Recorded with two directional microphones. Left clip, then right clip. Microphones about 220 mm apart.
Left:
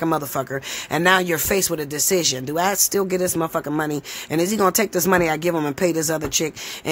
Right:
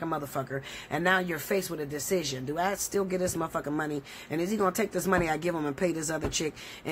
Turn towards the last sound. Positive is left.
turn(degrees=35)  # may be behind; listen again after turning